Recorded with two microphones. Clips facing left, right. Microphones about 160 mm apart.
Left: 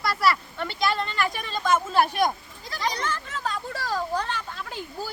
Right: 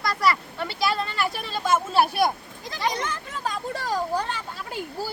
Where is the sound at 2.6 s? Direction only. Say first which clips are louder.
Right 2 dB; 20° right (ahead or behind).